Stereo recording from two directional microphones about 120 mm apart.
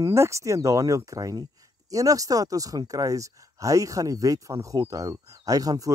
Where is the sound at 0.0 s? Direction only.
25° right (ahead or behind).